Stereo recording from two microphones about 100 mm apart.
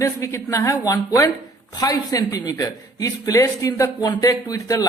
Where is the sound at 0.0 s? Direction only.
30° left (ahead or behind).